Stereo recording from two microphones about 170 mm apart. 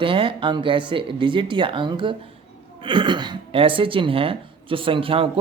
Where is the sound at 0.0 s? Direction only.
30° right (ahead or behind).